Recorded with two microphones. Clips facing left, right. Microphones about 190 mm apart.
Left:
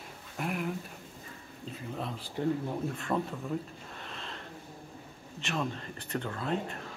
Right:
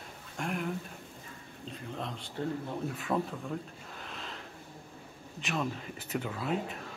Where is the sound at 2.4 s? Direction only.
15° left (ahead or behind).